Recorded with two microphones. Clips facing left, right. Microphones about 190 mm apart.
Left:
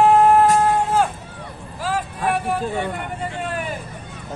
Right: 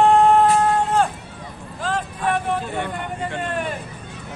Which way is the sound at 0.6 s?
5° left (ahead or behind).